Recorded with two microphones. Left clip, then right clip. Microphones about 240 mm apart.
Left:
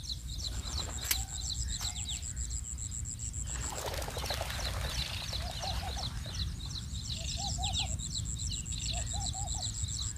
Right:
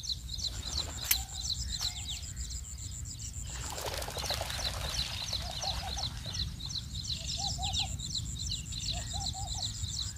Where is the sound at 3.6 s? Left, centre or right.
Centre.